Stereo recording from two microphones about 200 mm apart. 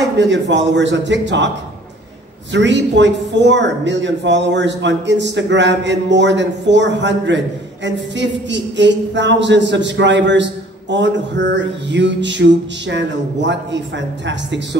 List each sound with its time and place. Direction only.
0.2 s speech: 65° right (ahead or behind)
2.5 s speech: 65° right (ahead or behind)